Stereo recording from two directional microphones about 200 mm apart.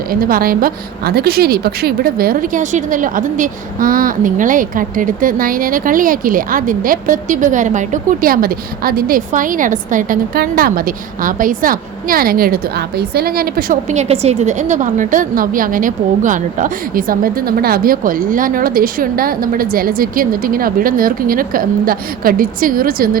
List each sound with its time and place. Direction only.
0.1 s a woman's voice: 45° right (ahead or behind)